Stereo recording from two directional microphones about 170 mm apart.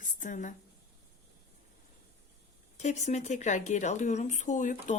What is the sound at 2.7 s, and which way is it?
Speech, 45° left (ahead or behind).